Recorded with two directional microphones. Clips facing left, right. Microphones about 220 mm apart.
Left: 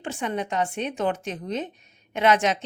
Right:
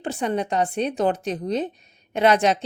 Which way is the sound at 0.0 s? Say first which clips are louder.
Right 4 dB; 35° right (ahead or behind).